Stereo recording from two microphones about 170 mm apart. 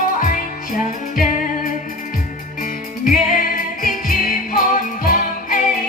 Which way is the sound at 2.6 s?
55° left (ahead or behind).